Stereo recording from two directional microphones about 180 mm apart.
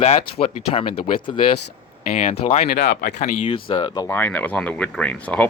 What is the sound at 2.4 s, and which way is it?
Speech, 35° left (ahead or behind).